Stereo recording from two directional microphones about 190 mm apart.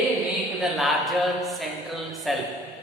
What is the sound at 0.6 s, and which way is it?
Speech, centre (ahead or behind).